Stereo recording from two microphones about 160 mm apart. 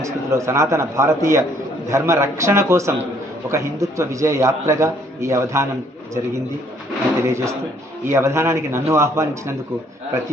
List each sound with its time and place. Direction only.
0.0 s a man's voice: 20° right (ahead or behind)
7.2 s a man's voice: 15° right (ahead or behind)